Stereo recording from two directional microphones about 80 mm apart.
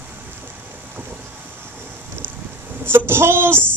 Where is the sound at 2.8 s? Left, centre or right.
Right.